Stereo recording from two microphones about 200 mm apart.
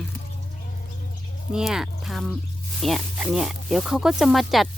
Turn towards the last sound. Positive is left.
turn(degrees=0)  # may be behind; listen again after turning